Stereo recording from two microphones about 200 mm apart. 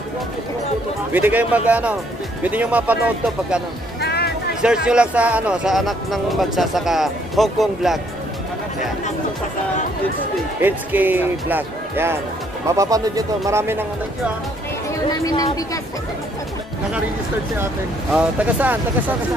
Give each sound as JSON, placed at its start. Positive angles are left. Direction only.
{"t": 1.1, "sound": "speech", "side_deg": -10}
{"t": 4.0, "sound": "music", "side_deg": 55}
{"t": 4.8, "sound": "speech", "side_deg": -5}
{"t": 10.6, "sound": "speech", "side_deg": -10}
{"t": 15.0, "sound": "a woman's voice", "side_deg": 20}
{"t": 18.1, "sound": "speech", "side_deg": -10}